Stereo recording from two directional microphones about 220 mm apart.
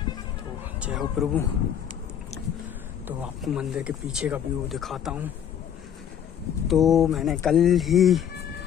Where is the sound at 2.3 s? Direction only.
30° left (ahead or behind).